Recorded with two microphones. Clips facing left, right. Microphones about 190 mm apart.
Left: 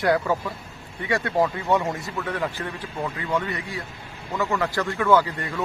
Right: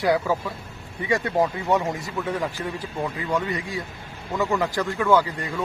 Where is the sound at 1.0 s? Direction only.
15° right (ahead or behind).